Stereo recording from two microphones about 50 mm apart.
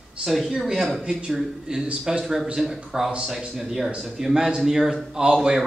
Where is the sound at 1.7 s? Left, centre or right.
Right.